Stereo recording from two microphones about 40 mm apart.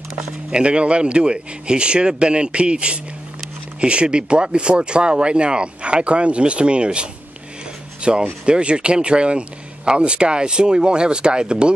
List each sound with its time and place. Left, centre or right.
0.5 s speech: right